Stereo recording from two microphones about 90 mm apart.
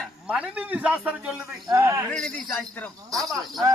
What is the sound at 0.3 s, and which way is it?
Speech, 15° right (ahead or behind).